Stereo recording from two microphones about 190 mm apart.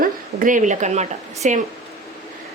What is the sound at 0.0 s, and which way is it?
Speech, 45° right (ahead or behind).